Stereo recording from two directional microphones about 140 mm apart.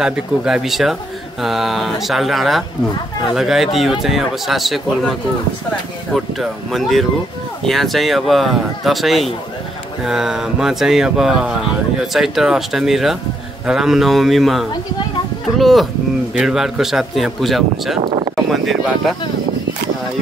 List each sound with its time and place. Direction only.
0.0 s speech: 5° right (ahead or behind)
6.1 s speech: centre (ahead or behind)
18.0 s a sound: 30° right (ahead or behind)
18.3 s speech: centre (ahead or behind)